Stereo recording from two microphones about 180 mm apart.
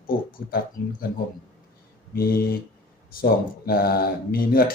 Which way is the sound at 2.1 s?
60° left (ahead or behind).